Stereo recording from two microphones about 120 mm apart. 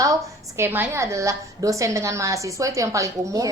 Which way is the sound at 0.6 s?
20° right (ahead or behind).